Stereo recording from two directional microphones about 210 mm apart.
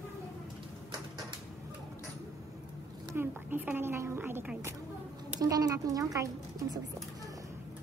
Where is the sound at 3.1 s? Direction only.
10° right (ahead or behind).